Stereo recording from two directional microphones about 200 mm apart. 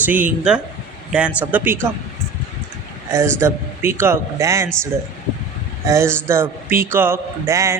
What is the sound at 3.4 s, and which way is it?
A man's voice, 10° right (ahead or behind).